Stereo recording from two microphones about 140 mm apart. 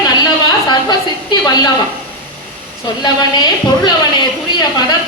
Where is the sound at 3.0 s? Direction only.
30° left (ahead or behind).